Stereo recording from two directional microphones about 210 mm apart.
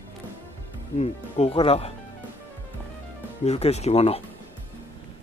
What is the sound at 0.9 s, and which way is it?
Speech, 30° left (ahead or behind).